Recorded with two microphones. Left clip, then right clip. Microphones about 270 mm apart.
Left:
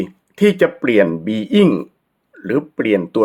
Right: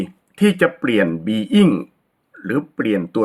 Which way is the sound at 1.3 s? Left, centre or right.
Centre.